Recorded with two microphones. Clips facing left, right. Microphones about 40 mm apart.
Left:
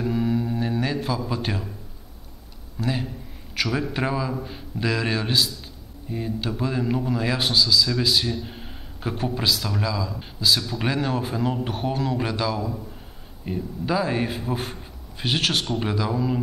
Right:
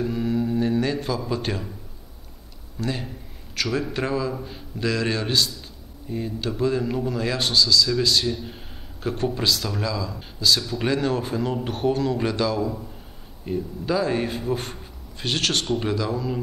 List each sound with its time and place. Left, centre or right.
0.0 s speech: centre
2.8 s speech: centre